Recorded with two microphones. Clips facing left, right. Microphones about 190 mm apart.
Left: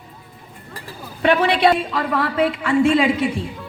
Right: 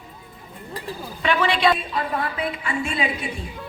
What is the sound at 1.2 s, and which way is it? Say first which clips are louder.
A woman's voice: left 5 dB; 60° left (ahead or behind).